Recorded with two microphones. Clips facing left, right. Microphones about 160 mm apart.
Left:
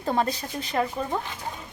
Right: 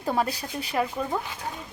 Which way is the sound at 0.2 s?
10° right (ahead or behind).